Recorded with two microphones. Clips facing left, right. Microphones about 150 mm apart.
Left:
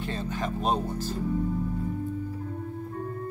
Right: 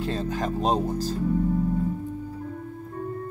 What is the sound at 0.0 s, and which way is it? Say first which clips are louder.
Speech: right 4 dB; 40° right (ahead or behind).